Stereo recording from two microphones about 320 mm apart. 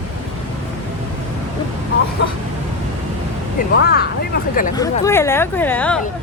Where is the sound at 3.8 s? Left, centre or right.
Left.